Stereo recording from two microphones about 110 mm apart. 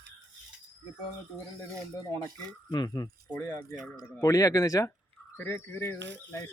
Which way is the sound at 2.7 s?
40° left (ahead or behind).